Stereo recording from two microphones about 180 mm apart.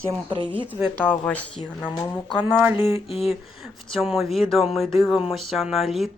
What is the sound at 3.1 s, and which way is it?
Speech, 35° left (ahead or behind).